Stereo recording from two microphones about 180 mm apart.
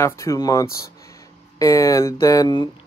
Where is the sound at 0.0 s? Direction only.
15° left (ahead or behind).